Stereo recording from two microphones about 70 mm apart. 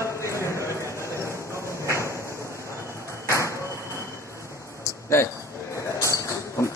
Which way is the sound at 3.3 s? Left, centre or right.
Left.